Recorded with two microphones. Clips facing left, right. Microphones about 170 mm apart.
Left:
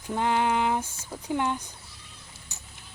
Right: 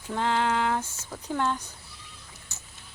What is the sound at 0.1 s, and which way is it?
Speech, 15° left (ahead or behind).